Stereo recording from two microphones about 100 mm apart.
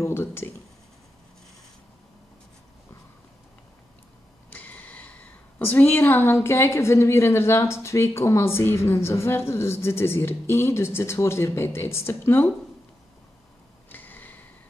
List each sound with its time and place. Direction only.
0.0 s speech: 25° left (ahead or behind)
4.5 s a woman's voice: 15° left (ahead or behind)
13.8 s a sound: 20° left (ahead or behind)